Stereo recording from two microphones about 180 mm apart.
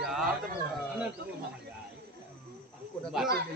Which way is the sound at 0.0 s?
Centre (ahead or behind).